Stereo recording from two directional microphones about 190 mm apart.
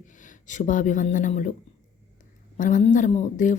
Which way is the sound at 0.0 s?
40° left (ahead or behind).